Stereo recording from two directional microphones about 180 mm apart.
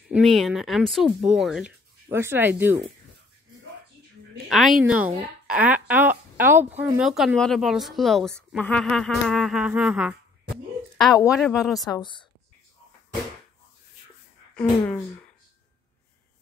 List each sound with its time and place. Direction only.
0.1 s speech: centre (ahead or behind)
2.0 s a woman's voice: 15° right (ahead or behind)
4.5 s a woman's voice: centre (ahead or behind)
11.9 s speech: 25° left (ahead or behind)
14.5 s speech: 5° left (ahead or behind)